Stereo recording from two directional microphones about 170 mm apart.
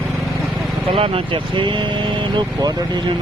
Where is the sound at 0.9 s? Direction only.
30° right (ahead or behind).